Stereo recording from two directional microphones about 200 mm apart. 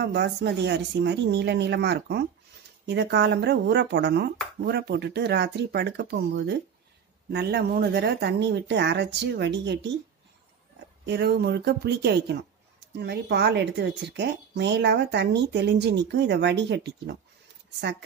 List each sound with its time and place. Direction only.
0.0 s a woman's voice: 60° right (ahead or behind)
11.1 s a woman's voice: 55° right (ahead or behind)